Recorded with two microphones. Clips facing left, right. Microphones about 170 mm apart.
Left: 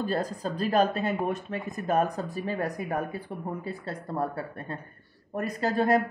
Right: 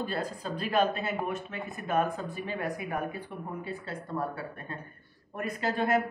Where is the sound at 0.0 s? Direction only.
40° left (ahead or behind).